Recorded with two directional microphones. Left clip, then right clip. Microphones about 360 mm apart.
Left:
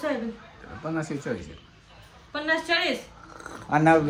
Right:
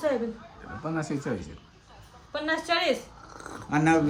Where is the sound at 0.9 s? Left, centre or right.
Centre.